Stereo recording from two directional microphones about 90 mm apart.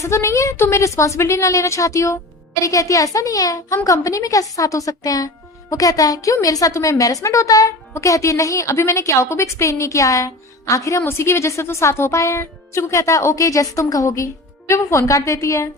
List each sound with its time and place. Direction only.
0.0 s a woman's voice: 30° left (ahead or behind)